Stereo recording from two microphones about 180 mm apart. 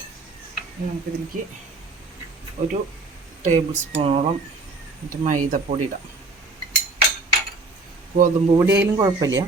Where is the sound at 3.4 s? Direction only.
40° right (ahead or behind).